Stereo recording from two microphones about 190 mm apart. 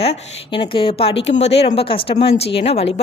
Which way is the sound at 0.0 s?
30° left (ahead or behind).